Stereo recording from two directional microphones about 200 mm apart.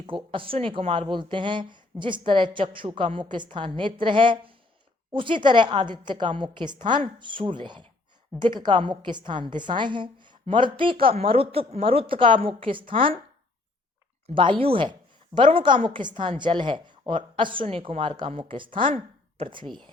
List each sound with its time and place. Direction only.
0.0 s speech: 25° right (ahead or behind)
14.3 s speech: 25° right (ahead or behind)
19.6 s speech: centre (ahead or behind)